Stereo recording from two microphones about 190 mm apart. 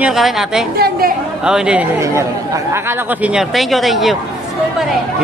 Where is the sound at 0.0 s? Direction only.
Centre (ahead or behind).